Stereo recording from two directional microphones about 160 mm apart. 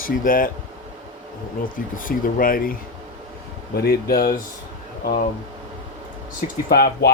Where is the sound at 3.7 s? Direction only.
75° left (ahead or behind).